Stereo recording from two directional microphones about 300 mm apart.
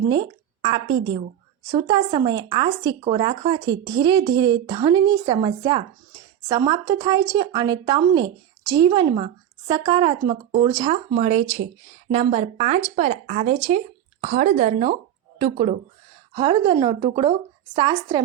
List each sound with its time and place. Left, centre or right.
0.1 s a woman's voice: centre